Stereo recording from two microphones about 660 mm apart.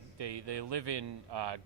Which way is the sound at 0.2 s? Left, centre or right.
Right.